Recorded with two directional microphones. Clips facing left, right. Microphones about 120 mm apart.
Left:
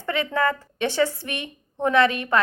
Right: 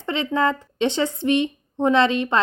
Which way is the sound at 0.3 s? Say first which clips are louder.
Right 2 dB; 20° right (ahead or behind).